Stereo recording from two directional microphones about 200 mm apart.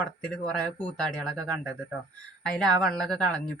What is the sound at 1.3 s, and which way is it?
Speech, 15° right (ahead or behind).